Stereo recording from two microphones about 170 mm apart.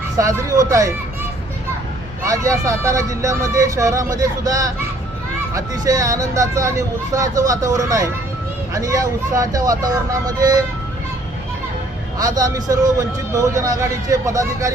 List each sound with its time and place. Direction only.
0.2 s speech: 20° right (ahead or behind)
2.2 s speech: 20° right (ahead or behind)
12.2 s speech: 20° right (ahead or behind)